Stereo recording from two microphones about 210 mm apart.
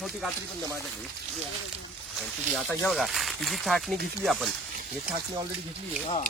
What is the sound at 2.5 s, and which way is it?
Speech, 5° left (ahead or behind).